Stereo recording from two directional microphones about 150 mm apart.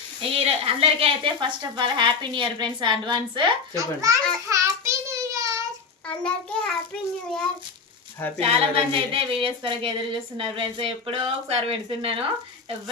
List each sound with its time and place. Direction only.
0.2 s a woman's voice: 40° right (ahead or behind)
3.8 s a child's voice: 20° right (ahead or behind)
4.4 s child singing: 20° right (ahead or behind)
6.1 s child singing: 5° left (ahead or behind)
8.4 s a woman's voice: 40° right (ahead or behind)